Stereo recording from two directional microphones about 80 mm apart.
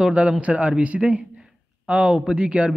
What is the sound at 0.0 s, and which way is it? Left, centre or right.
Speech, centre.